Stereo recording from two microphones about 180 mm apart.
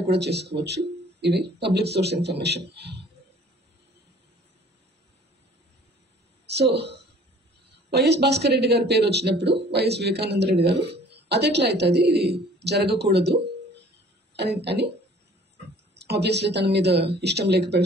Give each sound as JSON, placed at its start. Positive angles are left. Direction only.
{"t": 0.1, "sound": "speech", "side_deg": -65}
{"t": 7.9, "sound": "a man's voice", "side_deg": -65}
{"t": 15.9, "sound": "a man's voice", "side_deg": -65}